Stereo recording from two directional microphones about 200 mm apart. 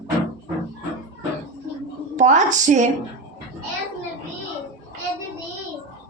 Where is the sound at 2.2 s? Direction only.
35° right (ahead or behind).